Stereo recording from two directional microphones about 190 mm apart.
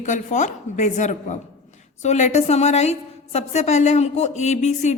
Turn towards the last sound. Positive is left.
turn(degrees=35)  # may be behind; listen again after turning